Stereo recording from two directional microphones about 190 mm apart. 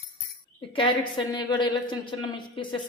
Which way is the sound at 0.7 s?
25° left (ahead or behind).